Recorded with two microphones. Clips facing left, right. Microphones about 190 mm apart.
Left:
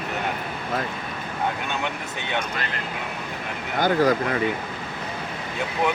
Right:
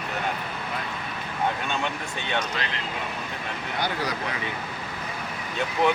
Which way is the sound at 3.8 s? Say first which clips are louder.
Left 10 dB; 50° left (ahead or behind).